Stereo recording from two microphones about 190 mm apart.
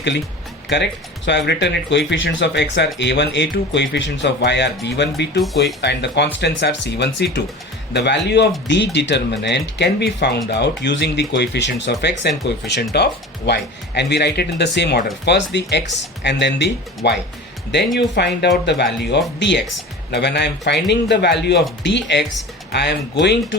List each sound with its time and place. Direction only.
0.7 s speech: 65° left (ahead or behind)